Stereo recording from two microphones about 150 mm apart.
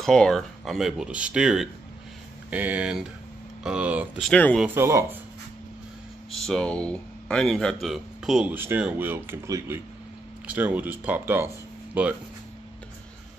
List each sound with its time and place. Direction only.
0.0 s speech: 5° left (ahead or behind)
4.2 s speech: 10° left (ahead or behind)
4.6 s speech: 15° right (ahead or behind)
6.3 s speech: 5° left (ahead or behind)